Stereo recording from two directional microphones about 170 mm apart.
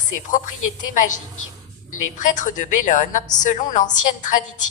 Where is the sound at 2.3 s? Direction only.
50° left (ahead or behind).